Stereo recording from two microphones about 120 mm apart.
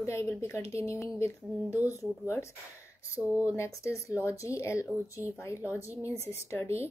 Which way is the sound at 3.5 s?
25° left (ahead or behind).